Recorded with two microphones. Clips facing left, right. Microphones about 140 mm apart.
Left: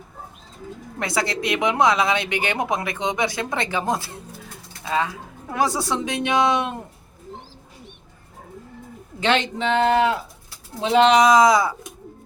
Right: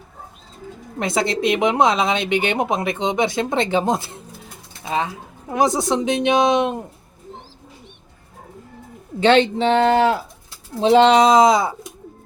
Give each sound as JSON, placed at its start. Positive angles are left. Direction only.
{"t": 0.9, "sound": "speech", "side_deg": -25}
{"t": 9.2, "sound": "speech", "side_deg": -30}